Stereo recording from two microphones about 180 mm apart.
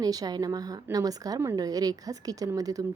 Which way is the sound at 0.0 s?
20° right (ahead or behind).